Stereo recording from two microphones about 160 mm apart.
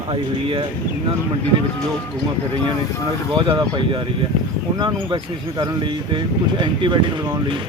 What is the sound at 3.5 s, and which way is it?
Speech, 30° right (ahead or behind).